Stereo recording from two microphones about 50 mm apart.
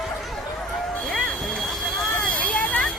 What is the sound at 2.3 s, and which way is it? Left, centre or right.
Vehicle, left.